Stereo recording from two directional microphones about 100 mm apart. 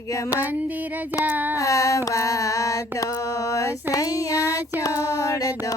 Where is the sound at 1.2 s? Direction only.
15° right (ahead or behind).